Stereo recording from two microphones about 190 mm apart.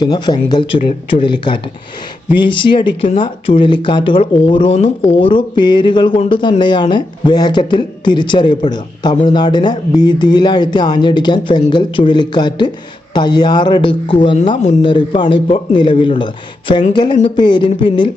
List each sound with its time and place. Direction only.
0.0 s speech: 20° left (ahead or behind)